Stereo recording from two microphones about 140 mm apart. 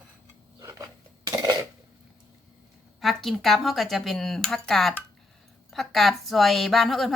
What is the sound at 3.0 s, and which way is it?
Speech, centre (ahead or behind).